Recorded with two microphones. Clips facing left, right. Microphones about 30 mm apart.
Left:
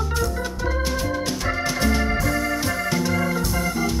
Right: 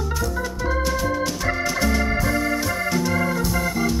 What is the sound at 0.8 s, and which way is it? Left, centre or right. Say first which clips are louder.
Organ: right 2 dB; centre.